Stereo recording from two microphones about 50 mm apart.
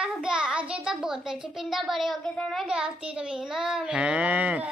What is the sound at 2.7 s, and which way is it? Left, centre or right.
A child's voice, centre.